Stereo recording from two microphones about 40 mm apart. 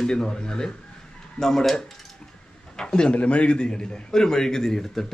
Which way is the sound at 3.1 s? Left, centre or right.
Left.